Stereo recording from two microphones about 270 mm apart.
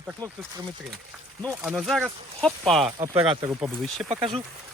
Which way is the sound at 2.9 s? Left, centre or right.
Centre.